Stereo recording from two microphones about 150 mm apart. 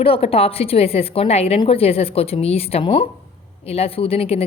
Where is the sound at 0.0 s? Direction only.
40° left (ahead or behind).